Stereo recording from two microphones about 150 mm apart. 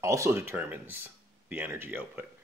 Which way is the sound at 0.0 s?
20° right (ahead or behind).